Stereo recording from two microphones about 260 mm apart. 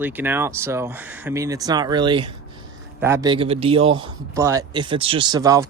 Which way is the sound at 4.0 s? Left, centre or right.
Centre.